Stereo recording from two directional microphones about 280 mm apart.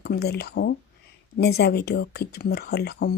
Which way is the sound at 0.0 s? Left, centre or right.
Left.